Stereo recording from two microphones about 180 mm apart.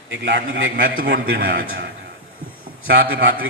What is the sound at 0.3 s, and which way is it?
A man's voice, 80° right.